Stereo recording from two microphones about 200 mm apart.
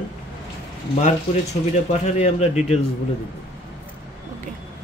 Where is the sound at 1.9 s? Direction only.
35° left (ahead or behind).